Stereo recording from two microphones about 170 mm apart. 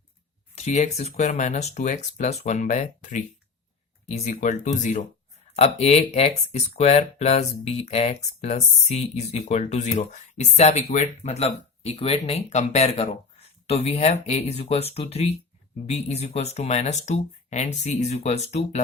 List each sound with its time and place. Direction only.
0.5 s speech: 45° left (ahead or behind)